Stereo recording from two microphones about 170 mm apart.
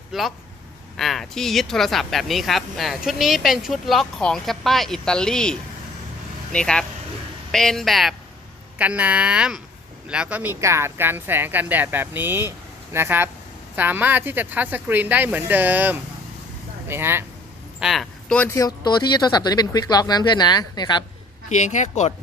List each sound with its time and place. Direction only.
0.1 s speech: centre (ahead or behind)
17.7 s speech: centre (ahead or behind); by 21.0 s 25° left (ahead or behind)
21.5 s speech: 45° left (ahead or behind)